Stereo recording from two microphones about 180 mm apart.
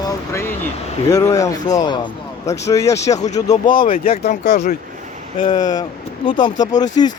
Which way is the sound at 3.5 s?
50° left (ahead or behind).